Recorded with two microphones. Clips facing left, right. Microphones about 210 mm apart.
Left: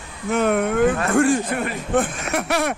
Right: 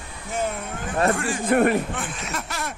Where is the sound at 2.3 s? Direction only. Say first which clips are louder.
Left 10 dB; 65° left (ahead or behind).